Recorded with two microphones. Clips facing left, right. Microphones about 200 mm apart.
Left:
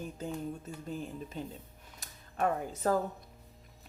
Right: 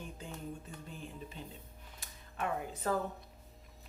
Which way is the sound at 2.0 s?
45° left (ahead or behind).